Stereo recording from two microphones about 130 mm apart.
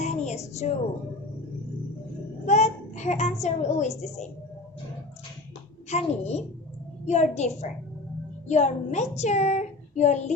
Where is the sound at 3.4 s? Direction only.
60° left (ahead or behind).